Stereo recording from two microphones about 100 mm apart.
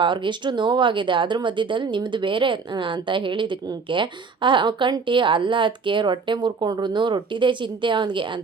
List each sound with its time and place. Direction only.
0.0 s speech: 50° right (ahead or behind)